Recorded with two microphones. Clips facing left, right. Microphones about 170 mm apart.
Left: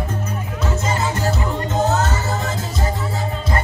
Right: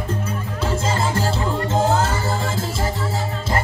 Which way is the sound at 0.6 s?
30° right (ahead or behind).